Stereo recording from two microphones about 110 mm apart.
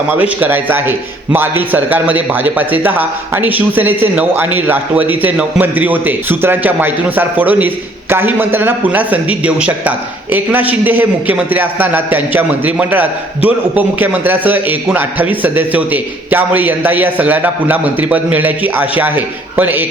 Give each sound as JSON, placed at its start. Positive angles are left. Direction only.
{"t": 0.1, "sound": "a man's voice", "side_deg": -15}